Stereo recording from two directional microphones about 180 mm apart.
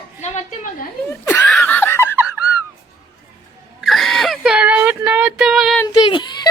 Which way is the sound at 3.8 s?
Centre (ahead or behind).